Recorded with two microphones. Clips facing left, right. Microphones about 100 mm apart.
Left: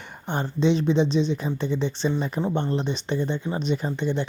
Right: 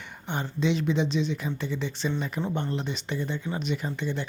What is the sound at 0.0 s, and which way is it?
Speech, 40° left (ahead or behind).